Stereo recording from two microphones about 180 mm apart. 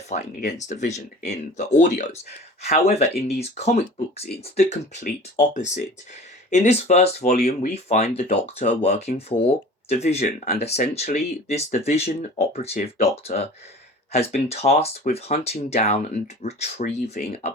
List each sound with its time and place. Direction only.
0.1 s speech: 40° left (ahead or behind)
15.1 s speech: 45° left (ahead or behind)
15.7 s speech: 35° left (ahead or behind)